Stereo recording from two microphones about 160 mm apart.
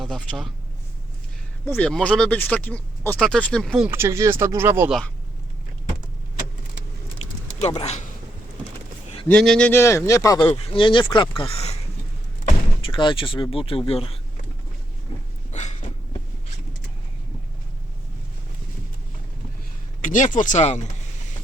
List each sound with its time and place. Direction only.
0.0 s speech: 5° left (ahead or behind)
1.6 s speech: 10° left (ahead or behind)
3.8 s speech: 15° right (ahead or behind)
4.9 s speech: centre (ahead or behind)
7.7 s speech: 35° left (ahead or behind)
9.3 s speech: 5° left (ahead or behind)
10.4 s speech: 40° left (ahead or behind)
12.8 s speech: 30° left (ahead or behind)
15.5 s a sound: 45° left (ahead or behind)
20.0 s speech: 55° left (ahead or behind)